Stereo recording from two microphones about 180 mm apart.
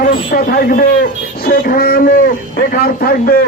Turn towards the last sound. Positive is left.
turn(degrees=55)  # may be behind; listen again after turning